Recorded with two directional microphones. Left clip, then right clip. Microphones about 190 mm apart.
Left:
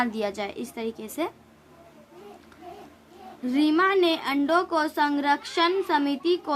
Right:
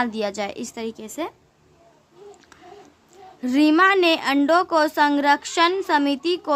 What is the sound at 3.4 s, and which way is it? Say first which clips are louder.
A woman's voice: right 6 dB; 35° right (ahead or behind).